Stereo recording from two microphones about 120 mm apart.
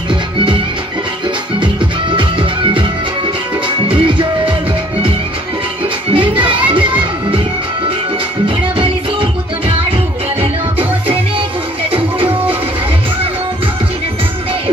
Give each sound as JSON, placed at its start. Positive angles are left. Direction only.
{"t": 1.6, "sound": "music", "side_deg": -45}
{"t": 6.1, "sound": "music", "side_deg": -45}
{"t": 8.5, "sound": "music", "side_deg": -45}
{"t": 10.8, "sound": "music", "side_deg": -45}